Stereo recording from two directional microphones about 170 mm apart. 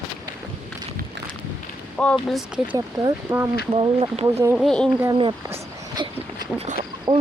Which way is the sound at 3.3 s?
20° right (ahead or behind).